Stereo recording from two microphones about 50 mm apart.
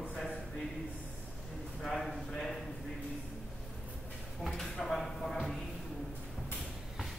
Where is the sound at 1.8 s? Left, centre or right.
Centre.